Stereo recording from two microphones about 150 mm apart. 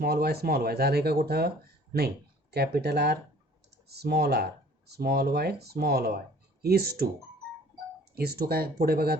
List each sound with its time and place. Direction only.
0.0 s speech: 90° right
8.1 s speech: 90° right